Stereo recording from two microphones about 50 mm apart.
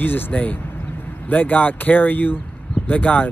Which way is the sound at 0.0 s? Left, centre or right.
Left.